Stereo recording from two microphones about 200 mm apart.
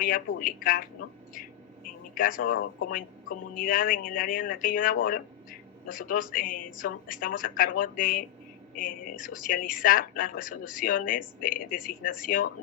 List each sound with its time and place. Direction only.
0.3 s speech: 45° left (ahead or behind)